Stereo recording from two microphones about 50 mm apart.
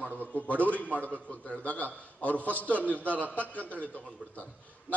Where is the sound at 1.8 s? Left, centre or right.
Left.